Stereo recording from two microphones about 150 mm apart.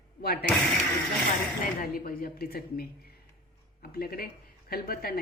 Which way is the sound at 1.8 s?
80° left.